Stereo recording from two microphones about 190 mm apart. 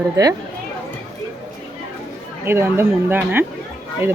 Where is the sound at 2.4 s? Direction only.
10° right (ahead or behind).